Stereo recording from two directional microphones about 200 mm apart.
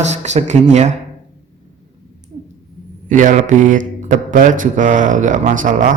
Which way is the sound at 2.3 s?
35° right (ahead or behind).